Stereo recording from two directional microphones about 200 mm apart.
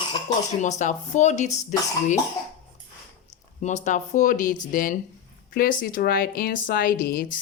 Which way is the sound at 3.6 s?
35° left (ahead or behind).